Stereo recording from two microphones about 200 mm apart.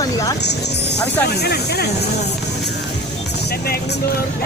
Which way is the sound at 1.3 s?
55° left (ahead or behind).